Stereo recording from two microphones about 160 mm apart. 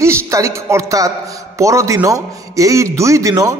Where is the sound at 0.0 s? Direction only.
20° right (ahead or behind).